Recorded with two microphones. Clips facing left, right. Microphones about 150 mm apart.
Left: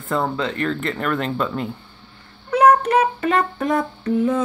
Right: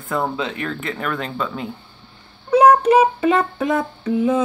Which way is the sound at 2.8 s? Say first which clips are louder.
Right 4 dB; 10° right (ahead or behind).